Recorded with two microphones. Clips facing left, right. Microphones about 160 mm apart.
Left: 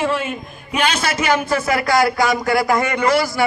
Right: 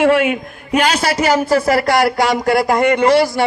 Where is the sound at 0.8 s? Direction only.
35° right (ahead or behind).